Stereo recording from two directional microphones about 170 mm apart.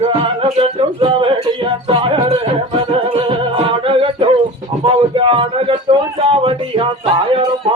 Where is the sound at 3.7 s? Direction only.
30° right (ahead or behind).